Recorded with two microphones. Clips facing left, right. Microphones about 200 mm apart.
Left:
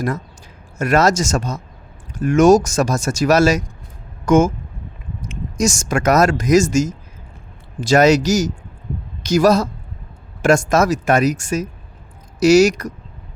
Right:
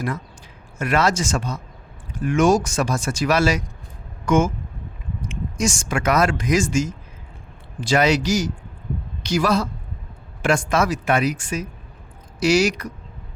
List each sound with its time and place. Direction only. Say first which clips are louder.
0.8 s speech: left 5 dB; 45° left (ahead or behind)